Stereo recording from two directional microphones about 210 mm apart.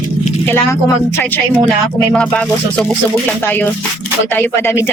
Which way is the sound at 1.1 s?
10° left (ahead or behind).